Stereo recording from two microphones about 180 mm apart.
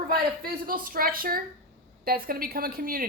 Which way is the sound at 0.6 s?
50° right (ahead or behind).